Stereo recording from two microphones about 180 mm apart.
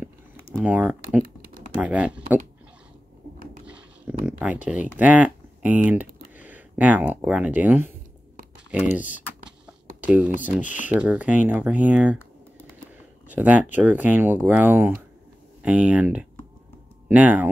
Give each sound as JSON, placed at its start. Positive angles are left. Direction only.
{"t": 0.6, "sound": "speech", "side_deg": -5}
{"t": 3.6, "sound": "a sound", "side_deg": -10}
{"t": 4.6, "sound": "speech", "side_deg": -5}
{"t": 9.9, "sound": "speech", "side_deg": -10}
{"t": 13.3, "sound": "speech", "side_deg": -10}